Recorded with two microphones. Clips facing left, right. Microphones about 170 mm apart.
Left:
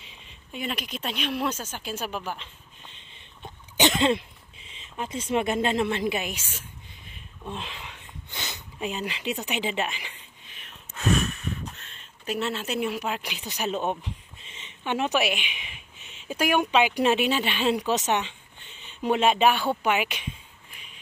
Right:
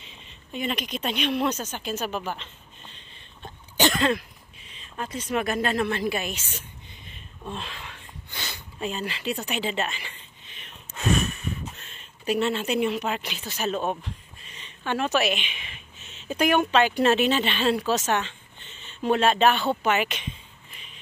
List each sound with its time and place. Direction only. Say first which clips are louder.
0.0 s a woman's voice: right 2 dB; 5° left (ahead or behind)
3.7 s a sound: left 1 dB; 20° left (ahead or behind)
4.8 s a woman's voice: left 1 dB; 20° left (ahead or behind)